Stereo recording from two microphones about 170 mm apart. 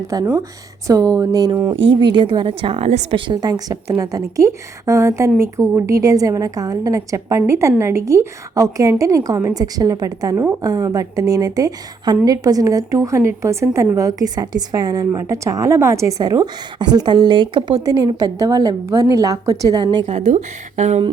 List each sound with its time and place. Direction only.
0.1 s a woman's voice: 20° right (ahead or behind); by 3.2 s 40° right (ahead or behind)
3.2 s a woman's voice: 25° right (ahead or behind)
20.1 s speech: 45° right (ahead or behind)